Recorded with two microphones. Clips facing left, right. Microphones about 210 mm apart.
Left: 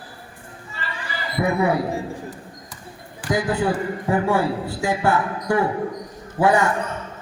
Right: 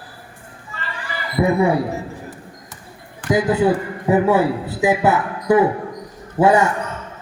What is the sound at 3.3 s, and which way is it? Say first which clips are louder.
A man's voice: right 5 dB; 25° right (ahead or behind).